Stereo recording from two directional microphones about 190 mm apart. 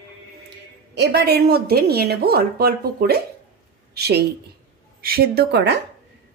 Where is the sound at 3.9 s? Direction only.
60° right (ahead or behind).